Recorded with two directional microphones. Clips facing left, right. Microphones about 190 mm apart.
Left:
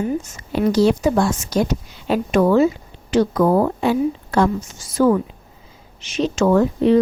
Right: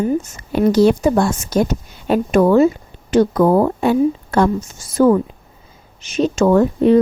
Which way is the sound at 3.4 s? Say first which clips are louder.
Right 3 dB; 40° right (ahead or behind).